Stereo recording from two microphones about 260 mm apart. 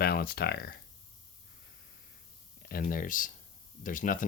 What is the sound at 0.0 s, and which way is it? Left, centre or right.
Speech, left.